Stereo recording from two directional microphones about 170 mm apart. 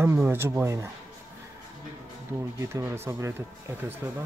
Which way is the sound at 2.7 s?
15° right (ahead or behind).